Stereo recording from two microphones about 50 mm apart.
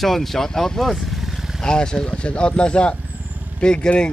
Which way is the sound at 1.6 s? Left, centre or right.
Centre.